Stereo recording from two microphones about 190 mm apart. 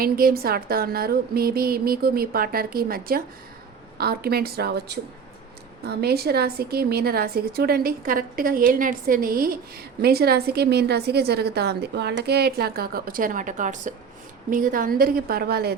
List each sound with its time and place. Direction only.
0.0 s a woman's voice: 50° right (ahead or behind)